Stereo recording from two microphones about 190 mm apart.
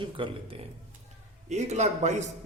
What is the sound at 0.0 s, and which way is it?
A man's voice, 25° right (ahead or behind).